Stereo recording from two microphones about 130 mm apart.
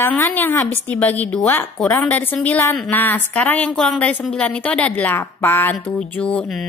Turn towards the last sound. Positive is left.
turn(degrees=5)  # may be behind; listen again after turning